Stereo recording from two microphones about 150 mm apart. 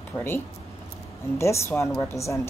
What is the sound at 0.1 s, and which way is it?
Speech, 15° left (ahead or behind).